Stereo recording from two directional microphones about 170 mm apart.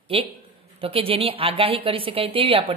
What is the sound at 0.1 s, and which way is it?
A woman's voice, 35° right (ahead or behind).